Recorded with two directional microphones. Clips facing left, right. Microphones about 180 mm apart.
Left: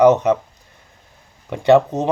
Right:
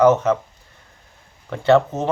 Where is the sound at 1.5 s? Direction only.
15° left (ahead or behind).